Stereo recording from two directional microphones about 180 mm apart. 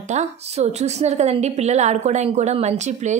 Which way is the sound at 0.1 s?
35° right (ahead or behind).